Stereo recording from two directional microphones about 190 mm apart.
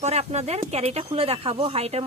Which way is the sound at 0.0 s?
35° right (ahead or behind).